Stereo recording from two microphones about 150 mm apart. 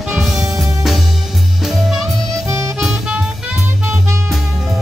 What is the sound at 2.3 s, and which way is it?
Music, 20° right (ahead or behind).